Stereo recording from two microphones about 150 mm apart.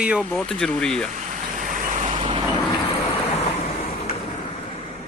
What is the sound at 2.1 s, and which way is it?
Vehicle, 35° right (ahead or behind).